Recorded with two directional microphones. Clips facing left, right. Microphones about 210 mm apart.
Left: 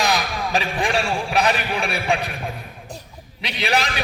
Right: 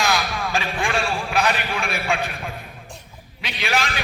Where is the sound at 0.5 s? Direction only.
35° left (ahead or behind).